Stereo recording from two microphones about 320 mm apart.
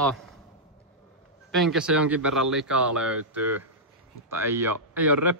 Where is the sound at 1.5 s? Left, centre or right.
Centre.